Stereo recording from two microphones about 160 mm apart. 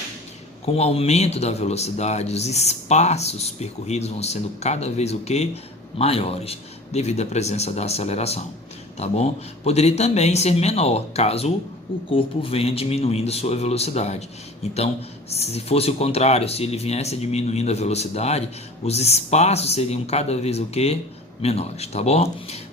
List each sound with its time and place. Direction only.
0.6 s speech: 40° left (ahead or behind)